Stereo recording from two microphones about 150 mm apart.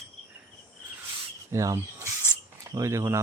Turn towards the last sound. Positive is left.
turn(degrees=-20)  # may be behind; listen again after turning